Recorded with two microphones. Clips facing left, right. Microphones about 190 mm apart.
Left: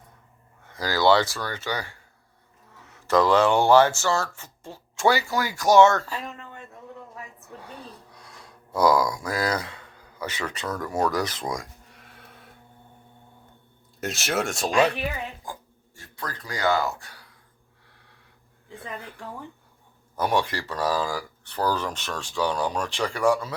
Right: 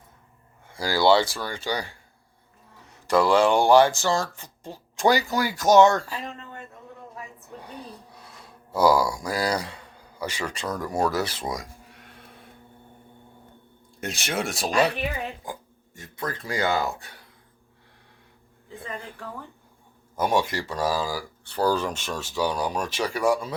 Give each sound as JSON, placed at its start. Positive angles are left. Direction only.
{"t": 0.7, "sound": "speech", "side_deg": -10}
{"t": 3.1, "sound": "speech", "side_deg": -10}
{"t": 7.6, "sound": "speech", "side_deg": -15}
{"t": 8.4, "sound": "a sound", "side_deg": -5}
{"t": 9.1, "sound": "speech", "side_deg": -10}
{"t": 11.1, "sound": "speech", "side_deg": -25}
{"t": 11.5, "sound": "a sound", "side_deg": 0}
{"t": 14.0, "sound": "speech", "side_deg": 0}
{"t": 15.4, "sound": "speech", "side_deg": -20}
{"t": 20.1, "sound": "speech", "side_deg": -15}